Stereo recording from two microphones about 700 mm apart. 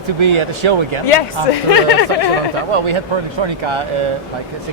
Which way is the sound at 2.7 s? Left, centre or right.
Right.